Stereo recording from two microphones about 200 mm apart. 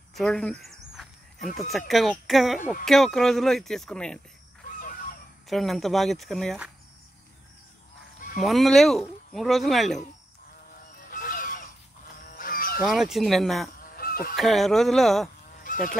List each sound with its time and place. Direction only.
0.1 s a sound: centre (ahead or behind)
1.6 s speech: centre (ahead or behind)
5.5 s speech: centre (ahead or behind)
8.4 s speech: centre (ahead or behind)
10.7 s fowl: 45° left (ahead or behind)
12.4 s livestock: 45° left (ahead or behind)
12.8 s speech: centre (ahead or behind)
13.7 s goose: 45° left (ahead or behind)
14.3 s speech: centre (ahead or behind)
15.6 s goose: 45° left (ahead or behind)